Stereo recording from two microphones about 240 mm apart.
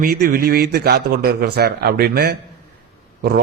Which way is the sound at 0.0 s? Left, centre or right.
Right.